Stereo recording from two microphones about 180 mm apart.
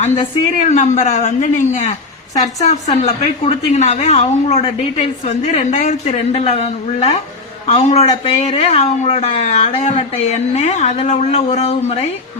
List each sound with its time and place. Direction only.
0.7 s a woman's voice: 40° left (ahead or behind)